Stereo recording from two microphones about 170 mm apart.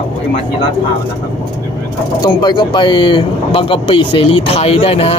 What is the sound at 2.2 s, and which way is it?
Speech, 25° left (ahead or behind).